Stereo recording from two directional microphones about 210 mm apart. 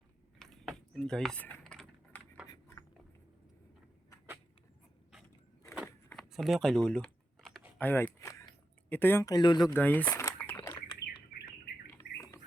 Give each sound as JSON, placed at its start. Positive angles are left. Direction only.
{"t": 0.3, "sound": "typing", "side_deg": 0}
{"t": 2.5, "sound": "a sound", "side_deg": 15}
{"t": 6.1, "sound": "typing", "side_deg": 0}
{"t": 7.8, "sound": "speech", "side_deg": 10}
{"t": 9.7, "sound": "a sound", "side_deg": 10}
{"t": 11.9, "sound": "bird", "side_deg": 15}